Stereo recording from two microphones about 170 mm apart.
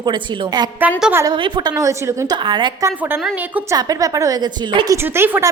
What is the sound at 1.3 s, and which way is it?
Speech, 30° right (ahead or behind).